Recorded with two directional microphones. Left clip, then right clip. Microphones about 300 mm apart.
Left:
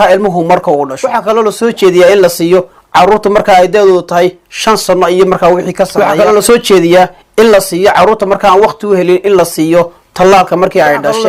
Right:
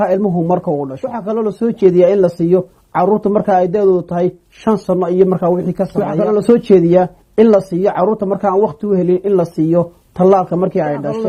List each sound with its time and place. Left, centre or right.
0.0 s a man's voice: centre
2.6 s a man's voice: centre
8.0 s a man's voice: centre
8.8 s a man's voice: centre
9.7 s a man's voice: centre